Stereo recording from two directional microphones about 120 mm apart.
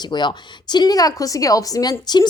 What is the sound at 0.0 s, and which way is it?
Speech, 40° left (ahead or behind).